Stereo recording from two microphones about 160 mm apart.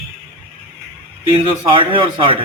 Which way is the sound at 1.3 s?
30° right (ahead or behind).